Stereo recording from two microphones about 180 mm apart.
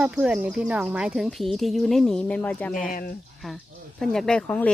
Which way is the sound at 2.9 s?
50° left (ahead or behind).